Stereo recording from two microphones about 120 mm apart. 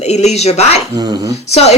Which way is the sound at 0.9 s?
30° right (ahead or behind).